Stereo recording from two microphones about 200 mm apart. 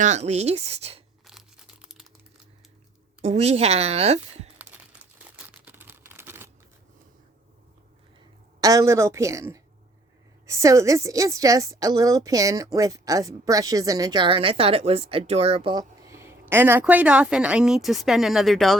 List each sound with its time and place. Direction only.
0.0 s a woman's voice: 35° right (ahead or behind)
1.2 s crumpling: centre (ahead or behind)
3.2 s a woman's voice: 35° right (ahead or behind)
4.5 s crumpling: 5° right (ahead or behind)
5.4 s a sound: 10° right (ahead or behind)
8.6 s a woman's voice: 15° right (ahead or behind); by 18.8 s centre (ahead or behind)